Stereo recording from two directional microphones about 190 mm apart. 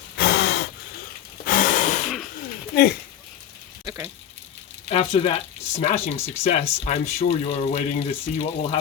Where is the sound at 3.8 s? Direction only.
15° right (ahead or behind).